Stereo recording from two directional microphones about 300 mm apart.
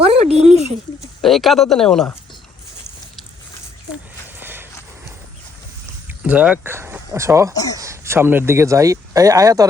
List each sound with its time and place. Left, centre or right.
0.0 s a sound: centre
1.2 s speech: centre
4.4 s a sound: centre
6.1 s speech: centre
7.5 s speech: centre
7.8 s speech: centre